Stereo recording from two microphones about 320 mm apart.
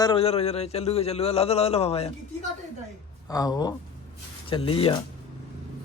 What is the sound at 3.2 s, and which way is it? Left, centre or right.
Speech, centre.